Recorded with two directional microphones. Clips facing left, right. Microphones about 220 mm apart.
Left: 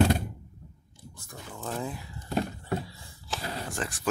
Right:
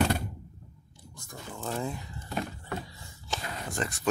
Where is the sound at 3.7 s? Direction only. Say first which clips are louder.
Right 1 dB; centre (ahead or behind).